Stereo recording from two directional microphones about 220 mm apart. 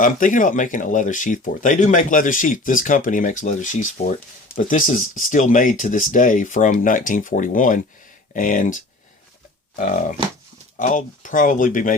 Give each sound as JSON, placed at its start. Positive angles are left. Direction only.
{"t": 0.0, "sound": "speech", "side_deg": 35}